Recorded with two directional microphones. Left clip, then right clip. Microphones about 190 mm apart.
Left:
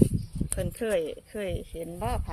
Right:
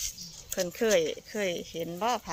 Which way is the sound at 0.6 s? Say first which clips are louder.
Right 3 dB; 5° right (ahead or behind).